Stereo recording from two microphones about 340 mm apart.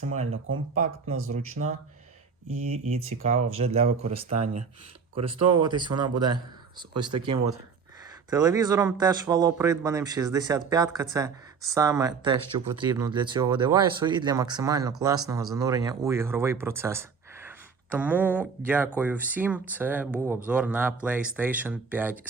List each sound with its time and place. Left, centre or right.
0.4 s speech: right
2.5 s speech: right
3.6 s speech: centre
5.6 s speech: centre